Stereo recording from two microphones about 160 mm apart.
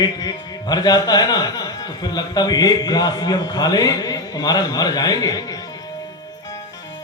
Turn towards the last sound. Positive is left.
turn(degrees=25)  # may be behind; listen again after turning